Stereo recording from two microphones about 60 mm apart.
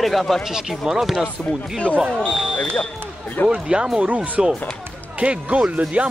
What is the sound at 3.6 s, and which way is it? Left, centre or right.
Speech, centre.